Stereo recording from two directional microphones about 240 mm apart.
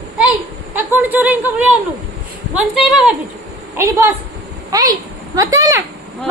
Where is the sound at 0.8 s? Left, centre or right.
Centre.